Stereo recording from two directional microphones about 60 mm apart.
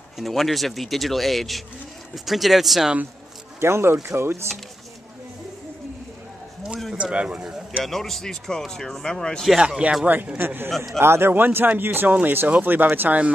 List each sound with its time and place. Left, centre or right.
0.2 s speech: centre
3.6 s speech: right
7.0 s speech: centre
7.8 s speech: centre
9.6 s speech: centre
10.3 s speech: right